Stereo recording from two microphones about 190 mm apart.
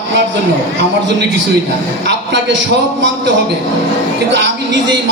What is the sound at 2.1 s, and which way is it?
A man's voice, 70° right (ahead or behind).